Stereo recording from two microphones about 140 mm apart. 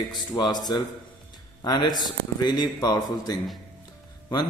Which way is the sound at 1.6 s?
30° left (ahead or behind).